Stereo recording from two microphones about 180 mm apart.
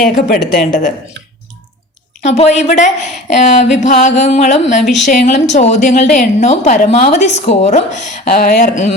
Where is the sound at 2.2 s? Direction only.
35° left (ahead or behind).